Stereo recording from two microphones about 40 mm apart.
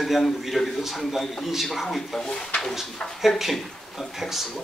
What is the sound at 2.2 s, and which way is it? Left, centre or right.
Speech, left.